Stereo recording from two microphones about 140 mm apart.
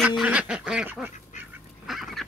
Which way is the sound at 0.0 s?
10° right (ahead or behind).